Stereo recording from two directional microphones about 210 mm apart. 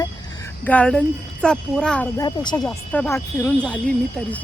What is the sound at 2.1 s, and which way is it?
Speech, 20° left (ahead or behind).